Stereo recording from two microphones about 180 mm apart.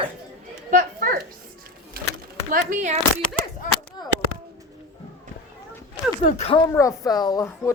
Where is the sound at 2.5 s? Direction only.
45° right (ahead or behind).